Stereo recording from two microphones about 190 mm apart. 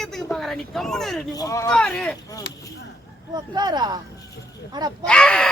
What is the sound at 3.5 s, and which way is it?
Speech, 20° right (ahead or behind).